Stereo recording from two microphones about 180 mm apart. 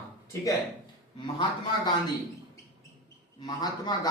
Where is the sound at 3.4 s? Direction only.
25° left (ahead or behind).